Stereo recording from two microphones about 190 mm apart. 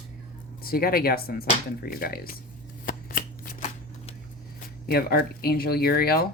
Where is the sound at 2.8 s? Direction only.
45° left (ahead or behind).